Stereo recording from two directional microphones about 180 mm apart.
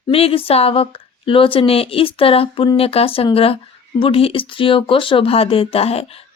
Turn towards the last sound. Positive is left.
turn(degrees=35)  # may be behind; listen again after turning